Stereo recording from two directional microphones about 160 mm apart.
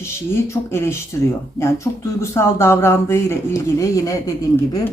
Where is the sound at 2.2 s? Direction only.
15° left (ahead or behind).